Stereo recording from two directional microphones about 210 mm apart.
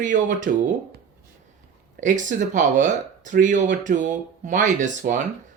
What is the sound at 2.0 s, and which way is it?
Speech, 35° right (ahead or behind).